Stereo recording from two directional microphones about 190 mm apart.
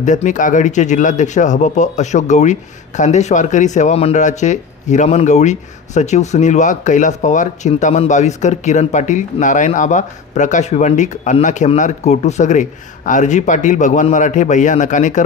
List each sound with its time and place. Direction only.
0.0 s speech: 40° left (ahead or behind)